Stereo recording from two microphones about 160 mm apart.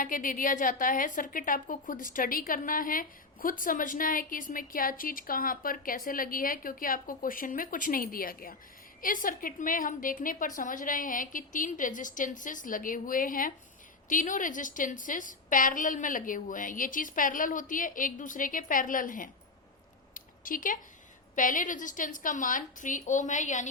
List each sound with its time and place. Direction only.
0.0 s a woman's voice: 60° left (ahead or behind)
20.1 s a sound: 60° left (ahead or behind)
21.3 s a woman's voice: 55° left (ahead or behind)